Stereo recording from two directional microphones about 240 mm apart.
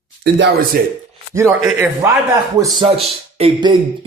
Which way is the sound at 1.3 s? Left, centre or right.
Centre.